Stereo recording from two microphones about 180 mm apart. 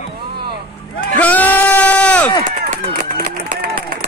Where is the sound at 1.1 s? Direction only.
10° left (ahead or behind).